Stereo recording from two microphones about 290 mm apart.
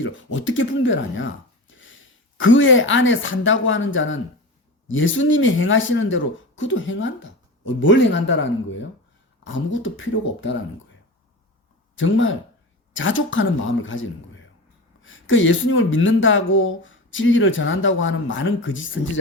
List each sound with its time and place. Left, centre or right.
0.0 s a woman's voice: left
11.9 s a woman's voice: left